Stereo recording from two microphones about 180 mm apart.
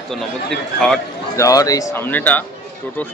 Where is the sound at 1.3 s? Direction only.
20° left (ahead or behind).